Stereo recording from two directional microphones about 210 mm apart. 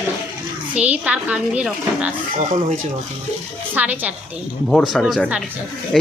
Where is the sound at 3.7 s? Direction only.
5° right (ahead or behind).